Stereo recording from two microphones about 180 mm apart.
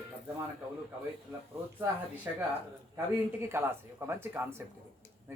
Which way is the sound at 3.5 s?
15° right (ahead or behind).